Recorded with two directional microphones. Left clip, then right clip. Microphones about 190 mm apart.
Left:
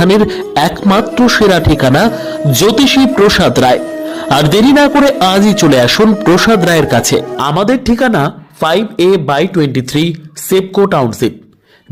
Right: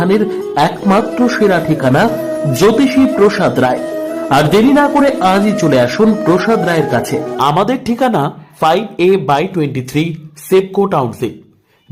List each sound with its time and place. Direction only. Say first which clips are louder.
0.0 s a man's voice: left 4 dB; 25° left (ahead or behind)